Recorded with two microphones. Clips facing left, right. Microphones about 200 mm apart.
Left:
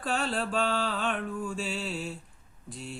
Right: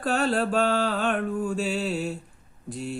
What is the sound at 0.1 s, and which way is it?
Mantra, 45° right (ahead or behind).